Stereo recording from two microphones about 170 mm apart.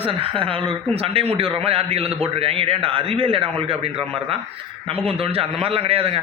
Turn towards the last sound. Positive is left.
turn(degrees=-35)  # may be behind; listen again after turning